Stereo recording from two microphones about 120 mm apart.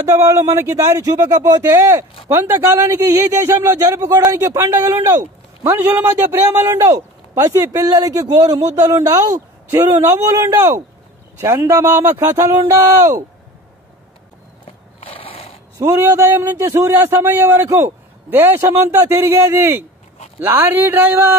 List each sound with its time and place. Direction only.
0.2 s a man's voice: 30° right (ahead or behind)
2.2 s a man's voice: 20° right (ahead or behind)
15.0 s mechanisms: 50° left (ahead or behind)
15.8 s a man's voice: 20° right (ahead or behind)